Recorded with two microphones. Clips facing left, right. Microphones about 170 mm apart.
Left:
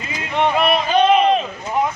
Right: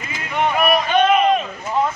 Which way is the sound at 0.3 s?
30° left (ahead or behind).